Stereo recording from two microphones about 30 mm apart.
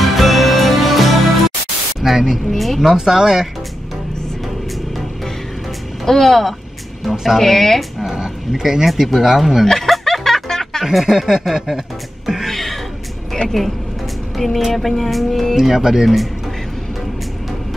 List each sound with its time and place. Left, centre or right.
0.0 s music: centre
2.0 s speech: centre
2.5 s speech: centre
2.9 s speech: centre
6.0 s speech: centre
8.0 s speech: right
9.7 s music: centre
10.8 s speech: centre
11.1 s speech: centre
12.4 s music: centre
13.5 s speech: centre
14.3 s music: centre
14.7 s speech: centre
15.5 s speech: centre